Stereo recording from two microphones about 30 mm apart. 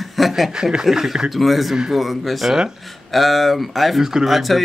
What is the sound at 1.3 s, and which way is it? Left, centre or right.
Speech, centre.